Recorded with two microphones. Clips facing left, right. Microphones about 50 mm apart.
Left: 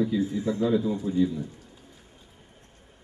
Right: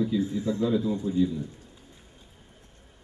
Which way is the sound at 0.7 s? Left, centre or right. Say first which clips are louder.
Left 2 dB; centre.